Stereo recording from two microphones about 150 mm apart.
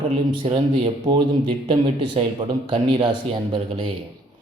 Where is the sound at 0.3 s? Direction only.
40° right (ahead or behind).